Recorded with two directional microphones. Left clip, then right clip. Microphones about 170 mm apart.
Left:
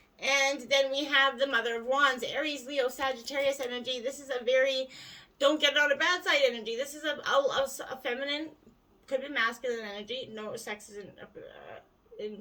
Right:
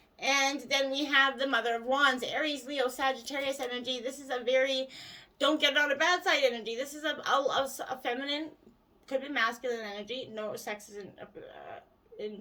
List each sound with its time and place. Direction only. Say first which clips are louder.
0.2 s speech: left 1 dB; 30° right (ahead or behind)